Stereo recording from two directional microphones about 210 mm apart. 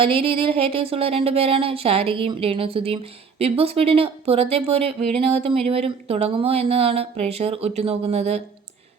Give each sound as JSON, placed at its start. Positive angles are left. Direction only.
{"t": 0.0, "sound": "speech", "side_deg": -25}